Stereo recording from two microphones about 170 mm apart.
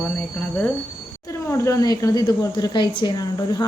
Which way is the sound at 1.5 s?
15° left (ahead or behind).